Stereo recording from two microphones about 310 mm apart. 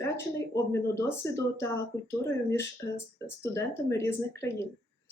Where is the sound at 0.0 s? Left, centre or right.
Centre.